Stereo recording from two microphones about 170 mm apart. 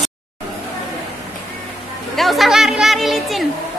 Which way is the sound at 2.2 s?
Centre (ahead or behind).